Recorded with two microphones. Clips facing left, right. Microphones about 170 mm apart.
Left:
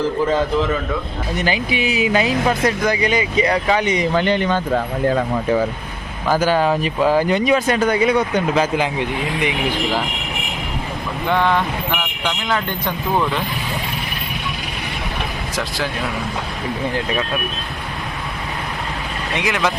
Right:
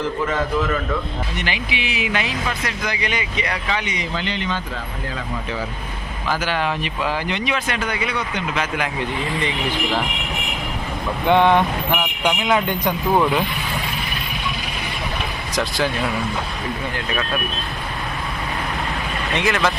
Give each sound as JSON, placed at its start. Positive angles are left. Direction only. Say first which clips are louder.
{"t": 1.5, "sound": "speech", "louder": "left 6 dB", "side_deg": 40}
{"t": 4.1, "sound": "speech", "louder": "left 8 dB", "side_deg": 50}
{"t": 6.2, "sound": "speech", "louder": "left 6 dB", "side_deg": 45}
{"t": 8.5, "sound": "speech", "louder": "left 6 dB", "side_deg": 30}
{"t": 11.3, "sound": "speech", "louder": "right 3 dB", "side_deg": -20}
{"t": 19.4, "sound": "speech", "louder": "even", "side_deg": 15}